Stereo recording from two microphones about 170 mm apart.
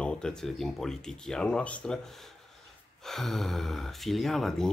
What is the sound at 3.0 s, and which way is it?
Speech, centre (ahead or behind).